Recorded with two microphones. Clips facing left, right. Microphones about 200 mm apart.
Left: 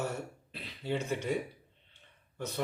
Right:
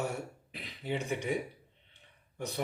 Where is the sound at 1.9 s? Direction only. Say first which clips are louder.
Right 1 dB; 15° right (ahead or behind).